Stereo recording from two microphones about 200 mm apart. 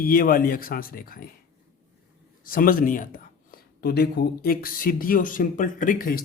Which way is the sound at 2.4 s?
45° left (ahead or behind).